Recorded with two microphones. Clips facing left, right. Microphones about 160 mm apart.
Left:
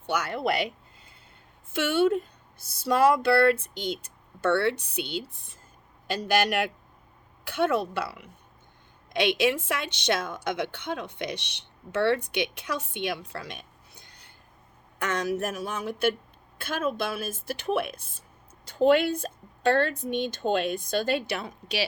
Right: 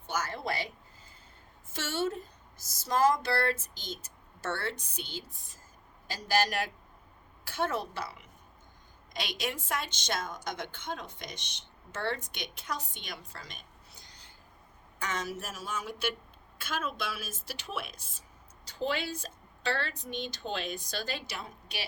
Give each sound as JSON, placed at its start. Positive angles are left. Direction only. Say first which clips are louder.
{"t": 0.0, "sound": "speech", "louder": "left 7 dB", "side_deg": 65}
{"t": 1.7, "sound": "speech", "louder": "left 10 dB", "side_deg": 60}